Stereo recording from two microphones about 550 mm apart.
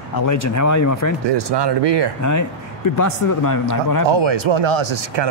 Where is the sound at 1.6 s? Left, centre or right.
Right.